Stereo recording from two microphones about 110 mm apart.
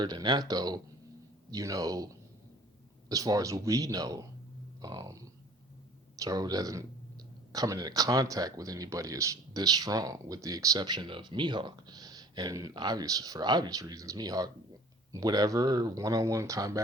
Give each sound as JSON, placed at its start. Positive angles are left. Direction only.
{"t": 0.0, "sound": "speech", "side_deg": -40}
{"t": 3.1, "sound": "speech", "side_deg": -35}